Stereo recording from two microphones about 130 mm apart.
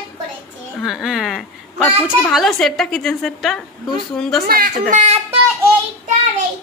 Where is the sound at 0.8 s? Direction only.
5° right (ahead or behind).